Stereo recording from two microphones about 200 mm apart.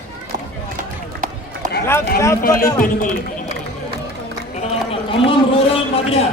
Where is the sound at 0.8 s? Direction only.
40° right (ahead or behind).